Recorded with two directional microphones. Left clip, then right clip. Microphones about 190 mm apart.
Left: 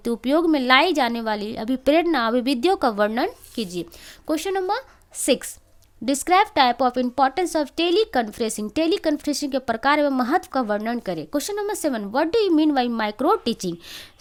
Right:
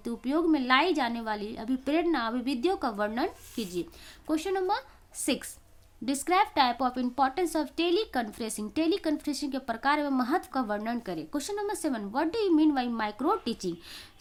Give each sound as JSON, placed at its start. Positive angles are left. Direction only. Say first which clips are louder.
{"t": 0.0, "sound": "a woman's voice", "louder": "left 9 dB", "side_deg": 45}